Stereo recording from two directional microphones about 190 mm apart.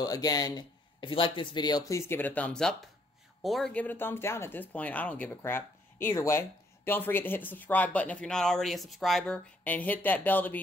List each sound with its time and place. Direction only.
0.0 s speech: 20° left (ahead or behind)